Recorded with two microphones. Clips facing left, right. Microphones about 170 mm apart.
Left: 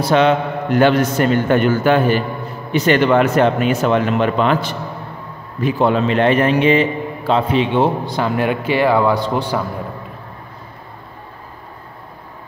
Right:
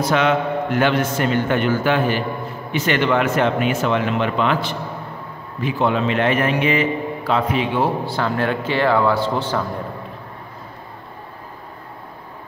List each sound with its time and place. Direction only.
0.0 s a man's voice: 30° left (ahead or behind); by 9.7 s 15° left (ahead or behind)